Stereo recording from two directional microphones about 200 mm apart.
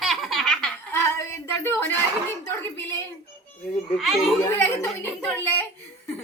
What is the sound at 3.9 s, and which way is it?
Speech, centre (ahead or behind).